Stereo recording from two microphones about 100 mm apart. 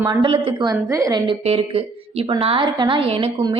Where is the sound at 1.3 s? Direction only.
75° right (ahead or behind).